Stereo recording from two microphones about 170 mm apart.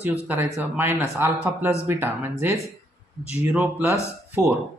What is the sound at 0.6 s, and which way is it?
Speech, 10° right (ahead or behind).